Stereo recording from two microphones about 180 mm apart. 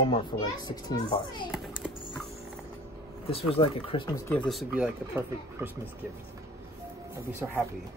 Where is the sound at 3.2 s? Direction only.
30° left (ahead or behind).